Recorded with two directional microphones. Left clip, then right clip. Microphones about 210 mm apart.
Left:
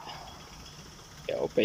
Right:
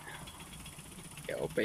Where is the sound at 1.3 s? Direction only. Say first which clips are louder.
Left 7 dB; 5° left (ahead or behind).